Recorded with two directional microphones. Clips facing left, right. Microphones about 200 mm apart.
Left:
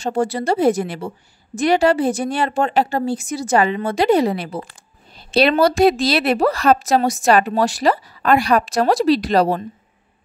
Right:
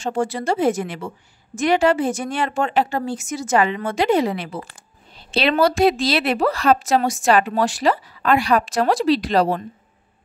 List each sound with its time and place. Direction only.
0.0 s a woman's voice: 35° left (ahead or behind)